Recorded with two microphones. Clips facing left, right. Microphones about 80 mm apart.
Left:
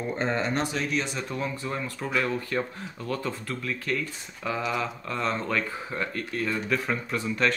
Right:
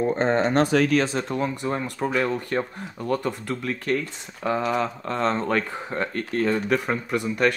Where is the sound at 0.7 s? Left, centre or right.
Right.